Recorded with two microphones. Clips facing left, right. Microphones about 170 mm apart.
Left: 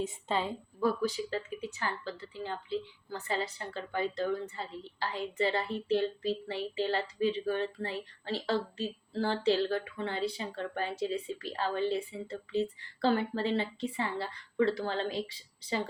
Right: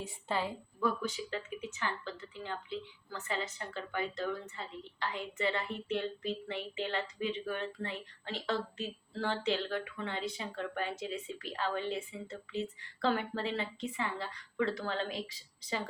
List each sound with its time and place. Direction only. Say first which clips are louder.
0.0 s a woman's voice: left 3 dB; 20° left (ahead or behind)
0.8 s a woman's voice: left 4 dB; 35° left (ahead or behind)